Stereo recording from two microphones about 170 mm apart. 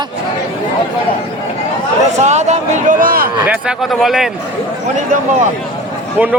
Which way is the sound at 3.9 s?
Centre (ahead or behind).